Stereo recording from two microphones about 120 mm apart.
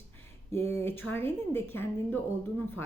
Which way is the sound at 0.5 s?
20° left (ahead or behind).